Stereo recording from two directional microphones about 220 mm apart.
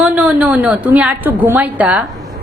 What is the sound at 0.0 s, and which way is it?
A woman's voice, 5° right (ahead or behind).